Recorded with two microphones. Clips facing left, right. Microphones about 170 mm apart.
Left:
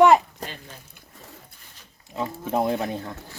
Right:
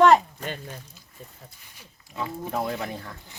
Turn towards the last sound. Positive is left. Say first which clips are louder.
# left 5 dB
turn(degrees=20)  # may be behind; listen again after turning